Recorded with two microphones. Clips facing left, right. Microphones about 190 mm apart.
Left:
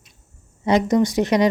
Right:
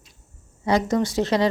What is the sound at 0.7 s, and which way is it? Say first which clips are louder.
Speech: left 4 dB; 20° left (ahead or behind).